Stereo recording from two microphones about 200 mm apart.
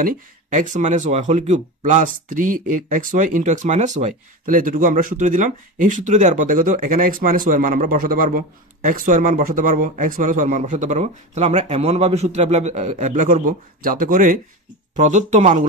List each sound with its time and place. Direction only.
0.0 s speech: 40° right (ahead or behind)